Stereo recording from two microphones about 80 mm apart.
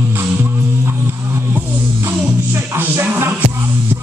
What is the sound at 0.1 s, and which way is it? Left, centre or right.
Music, right.